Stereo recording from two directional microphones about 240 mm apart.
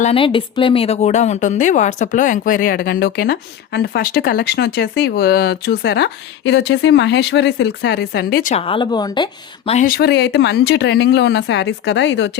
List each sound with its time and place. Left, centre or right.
0.0 s a woman's voice: left